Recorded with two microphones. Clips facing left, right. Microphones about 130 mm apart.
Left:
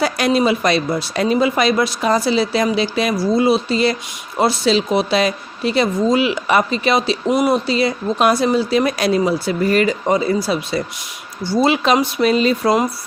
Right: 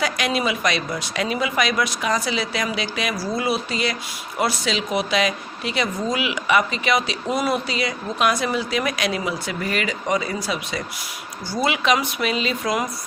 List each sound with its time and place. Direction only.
0.0 s speech: 35° left (ahead or behind)